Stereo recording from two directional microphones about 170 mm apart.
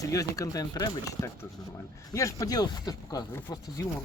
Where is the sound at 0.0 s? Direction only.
20° left (ahead or behind).